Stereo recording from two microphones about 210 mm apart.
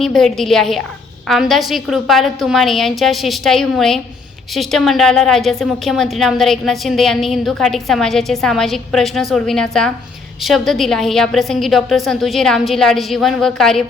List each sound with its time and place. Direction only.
0.0 s a woman's voice: centre (ahead or behind)